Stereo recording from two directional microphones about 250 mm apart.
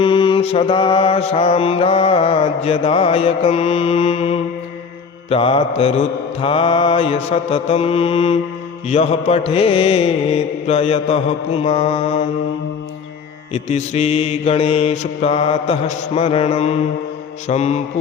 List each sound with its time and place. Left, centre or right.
0.0 s mantra: left
13.5 s mantra: left